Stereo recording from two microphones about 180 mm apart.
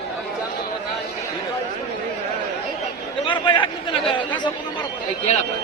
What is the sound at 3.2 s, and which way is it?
Chatter, 25° left (ahead or behind).